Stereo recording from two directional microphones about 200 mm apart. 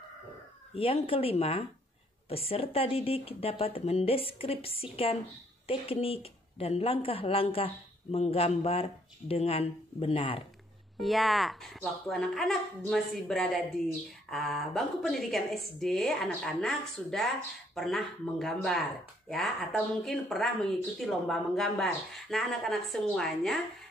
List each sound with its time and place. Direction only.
0.7 s a woman's voice: 30° left (ahead or behind)
11.0 s speech: centre (ahead or behind)